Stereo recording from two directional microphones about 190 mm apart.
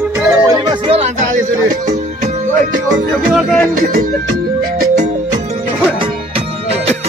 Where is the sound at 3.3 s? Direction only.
5° left (ahead or behind).